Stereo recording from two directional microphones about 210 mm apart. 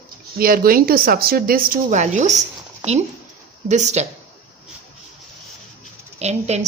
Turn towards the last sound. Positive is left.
turn(degrees=-30)  # may be behind; listen again after turning